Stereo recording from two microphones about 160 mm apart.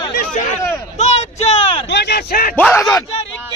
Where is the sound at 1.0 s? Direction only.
45° left (ahead or behind).